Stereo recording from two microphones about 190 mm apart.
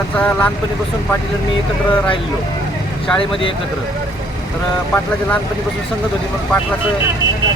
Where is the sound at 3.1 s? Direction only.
25° left (ahead or behind).